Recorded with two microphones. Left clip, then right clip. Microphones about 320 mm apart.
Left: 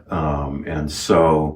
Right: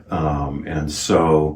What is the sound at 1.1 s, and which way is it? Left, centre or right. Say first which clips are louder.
Speech: left 2 dB; centre.